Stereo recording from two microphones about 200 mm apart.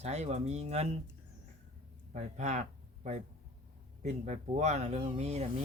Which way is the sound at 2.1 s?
35° right (ahead or behind).